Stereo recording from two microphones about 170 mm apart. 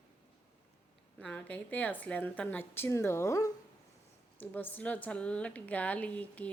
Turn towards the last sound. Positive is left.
turn(degrees=10)  # may be behind; listen again after turning